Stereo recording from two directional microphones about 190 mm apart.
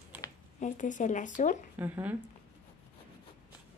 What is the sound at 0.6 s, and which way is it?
Speech, 40° left (ahead or behind).